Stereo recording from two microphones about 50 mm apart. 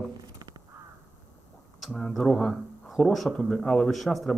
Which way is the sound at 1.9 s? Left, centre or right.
Centre.